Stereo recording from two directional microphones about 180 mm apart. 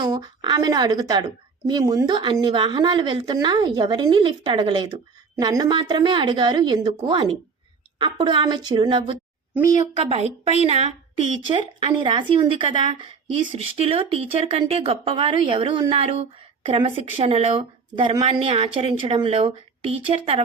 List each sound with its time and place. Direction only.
0.0 s speech: 25° right (ahead or behind)
10.0 s a woman's voice: 35° right (ahead or behind)